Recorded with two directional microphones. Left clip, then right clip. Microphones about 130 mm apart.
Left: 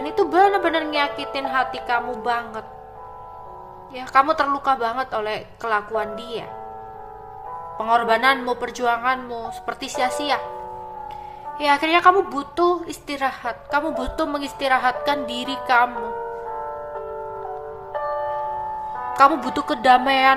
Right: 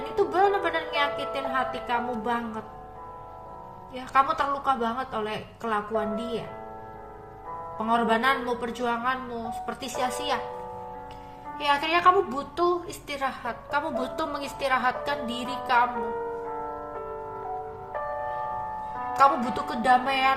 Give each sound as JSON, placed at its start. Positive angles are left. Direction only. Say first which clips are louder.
{"t": 0.1, "sound": "speech", "louder": "left 6 dB", "side_deg": 40}
{"t": 3.9, "sound": "speech", "louder": "left 6 dB", "side_deg": 35}
{"t": 7.8, "sound": "speech", "louder": "left 6 dB", "side_deg": 40}
{"t": 11.5, "sound": "a woman's voice", "louder": "left 6 dB", "side_deg": 25}
{"t": 16.5, "sound": "music", "louder": "left 4 dB", "side_deg": 20}
{"t": 17.9, "sound": "tubular bells", "louder": "left 7 dB", "side_deg": 20}
{"t": 19.1, "sound": "speech", "louder": "left 5 dB", "side_deg": 40}